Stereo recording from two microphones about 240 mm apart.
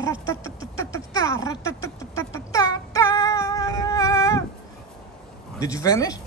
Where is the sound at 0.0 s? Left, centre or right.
Centre.